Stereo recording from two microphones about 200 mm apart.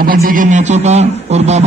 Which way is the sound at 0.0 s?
45° right (ahead or behind).